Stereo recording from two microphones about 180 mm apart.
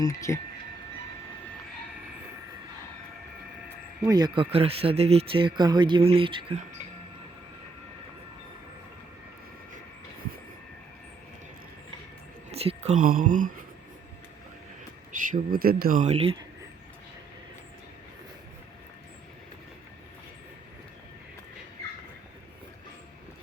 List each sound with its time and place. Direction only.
0.0 s speech: 20° left (ahead or behind)
4.0 s speech: 20° right (ahead or behind)
12.5 s speech: 35° right (ahead or behind)
15.3 s speech: 55° right (ahead or behind); by 16.4 s 35° right (ahead or behind)